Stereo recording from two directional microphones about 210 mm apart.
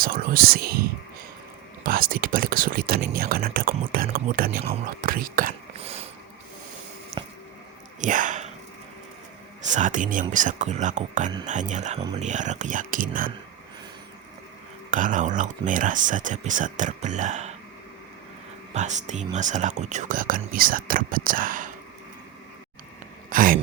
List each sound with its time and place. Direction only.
0.0 s speech: 45° right (ahead or behind)
5.7 s a sound: 30° right (ahead or behind)
7.2 s squish: 25° right (ahead or behind)
8.0 s a sound: 40° right (ahead or behind)
9.6 s speech: 35° right (ahead or behind)
11.9 s speech: 20° right (ahead or behind)
12.2 s speech: 35° right (ahead or behind)
14.8 s speech: 40° right (ahead or behind)
18.7 s speech: 35° right (ahead or behind)
23.3 s a sound: 40° right (ahead or behind)